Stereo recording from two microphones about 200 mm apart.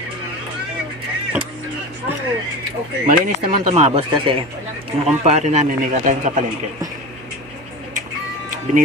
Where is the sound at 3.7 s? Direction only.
30° right (ahead or behind).